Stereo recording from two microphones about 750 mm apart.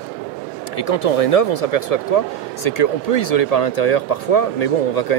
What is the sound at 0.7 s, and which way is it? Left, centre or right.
Speech, left.